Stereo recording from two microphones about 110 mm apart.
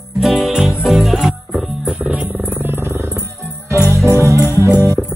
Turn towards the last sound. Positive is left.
turn(degrees=-25)  # may be behind; listen again after turning